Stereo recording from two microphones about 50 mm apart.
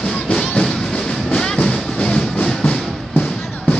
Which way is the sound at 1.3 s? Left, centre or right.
Centre.